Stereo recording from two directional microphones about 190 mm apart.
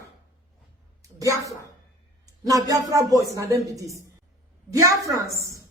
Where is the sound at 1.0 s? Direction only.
15° right (ahead or behind).